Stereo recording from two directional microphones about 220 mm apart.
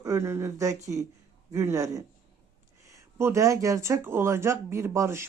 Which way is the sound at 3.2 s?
10° right (ahead or behind).